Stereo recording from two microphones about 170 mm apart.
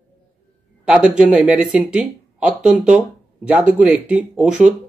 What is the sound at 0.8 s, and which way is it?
Speech, 5° right (ahead or behind).